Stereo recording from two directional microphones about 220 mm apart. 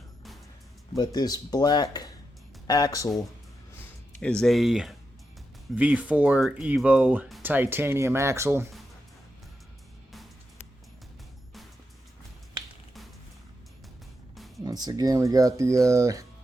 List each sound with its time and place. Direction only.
0.9 s speech: 20° left (ahead or behind)
4.2 s speech: 5° left (ahead or behind); by 8.7 s 10° right (ahead or behind)
14.3 s music: centre (ahead or behind)
14.6 s speech: 15° right (ahead or behind)